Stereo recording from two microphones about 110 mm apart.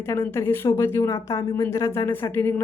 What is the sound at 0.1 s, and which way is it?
Speech, 25° left (ahead or behind).